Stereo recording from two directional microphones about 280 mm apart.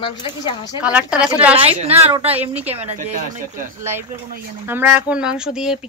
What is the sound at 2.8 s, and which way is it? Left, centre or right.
Speech, right.